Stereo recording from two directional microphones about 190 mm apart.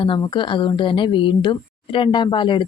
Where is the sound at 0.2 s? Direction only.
25° left (ahead or behind).